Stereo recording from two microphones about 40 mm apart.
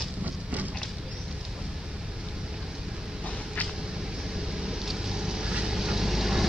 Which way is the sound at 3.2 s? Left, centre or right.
Left.